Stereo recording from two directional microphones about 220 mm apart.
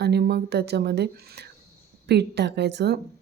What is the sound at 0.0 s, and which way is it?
Speech, 50° right (ahead or behind).